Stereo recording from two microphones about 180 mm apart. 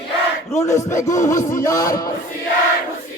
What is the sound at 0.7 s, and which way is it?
Music, 15° left (ahead or behind).